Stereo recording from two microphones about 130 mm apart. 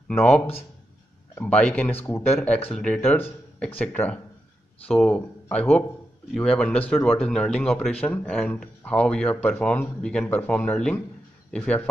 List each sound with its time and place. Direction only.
1.3 s speech: 10° left (ahead or behind)
2.7 s speech: 5° left (ahead or behind)